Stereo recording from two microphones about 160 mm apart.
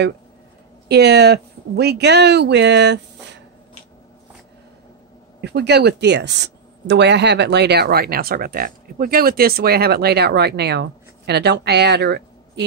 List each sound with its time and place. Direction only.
0.8 s speech: 90° right
5.4 s speech: 90° right